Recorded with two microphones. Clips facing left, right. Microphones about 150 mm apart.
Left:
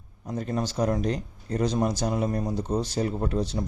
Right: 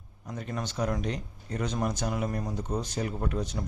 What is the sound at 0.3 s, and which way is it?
Speech, 35° left (ahead or behind).